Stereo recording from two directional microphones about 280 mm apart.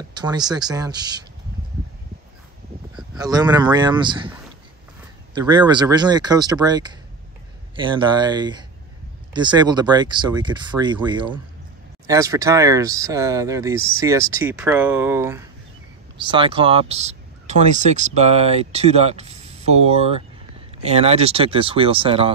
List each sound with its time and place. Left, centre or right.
0.1 s speech: centre
3.2 s speech: centre
5.3 s speech: centre